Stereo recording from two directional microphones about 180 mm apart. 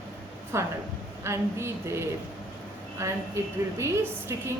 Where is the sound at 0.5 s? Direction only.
15° right (ahead or behind).